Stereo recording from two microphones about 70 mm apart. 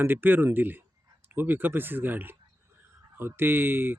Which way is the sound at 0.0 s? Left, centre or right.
Right.